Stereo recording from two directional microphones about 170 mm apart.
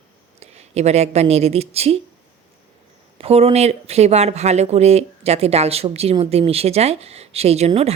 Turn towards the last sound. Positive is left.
turn(degrees=-40)  # may be behind; listen again after turning